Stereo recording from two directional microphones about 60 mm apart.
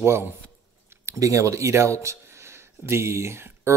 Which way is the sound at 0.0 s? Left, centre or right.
Right.